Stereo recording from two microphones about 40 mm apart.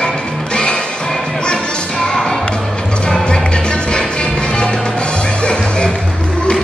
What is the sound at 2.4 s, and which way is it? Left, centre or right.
Music, left.